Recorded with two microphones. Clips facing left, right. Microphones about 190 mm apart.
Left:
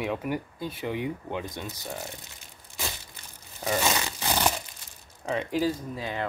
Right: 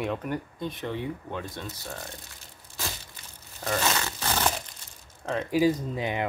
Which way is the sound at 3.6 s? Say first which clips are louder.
Left 1 dB; 15° left (ahead or behind).